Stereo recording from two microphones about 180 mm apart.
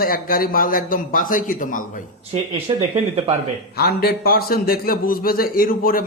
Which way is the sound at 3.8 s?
60° left (ahead or behind).